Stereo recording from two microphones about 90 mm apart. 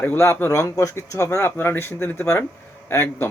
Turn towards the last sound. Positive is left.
turn(degrees=25)  # may be behind; listen again after turning